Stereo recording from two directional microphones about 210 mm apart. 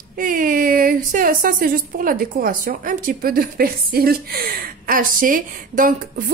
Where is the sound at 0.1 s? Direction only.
40° right (ahead or behind).